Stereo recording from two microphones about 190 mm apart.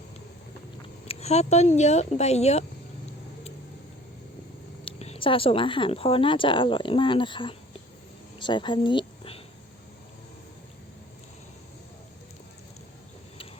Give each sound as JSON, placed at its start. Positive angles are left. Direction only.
{"t": 1.0, "sound": "speech", "side_deg": 35}
{"t": 4.9, "sound": "speech", "side_deg": 30}
{"t": 8.4, "sound": "a sound", "side_deg": 25}